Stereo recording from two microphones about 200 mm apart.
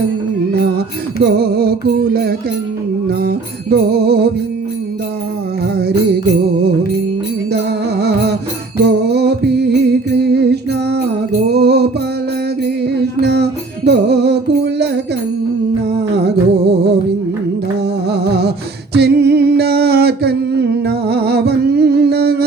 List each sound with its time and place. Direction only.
1.2 s music: 55° right (ahead or behind)
5.7 s music: 55° right (ahead or behind)
8.9 s music: 55° right (ahead or behind)
12.8 s music: 55° right (ahead or behind)
16.0 s humming: 55° right (ahead or behind)
18.1 s music: 55° right (ahead or behind)
18.9 s a sound: 55° right (ahead or behind)